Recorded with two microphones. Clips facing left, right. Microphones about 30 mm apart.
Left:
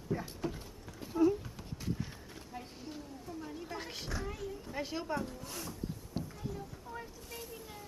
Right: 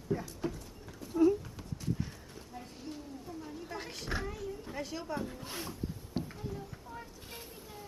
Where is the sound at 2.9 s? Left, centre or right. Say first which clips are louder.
Right 1 dB; centre.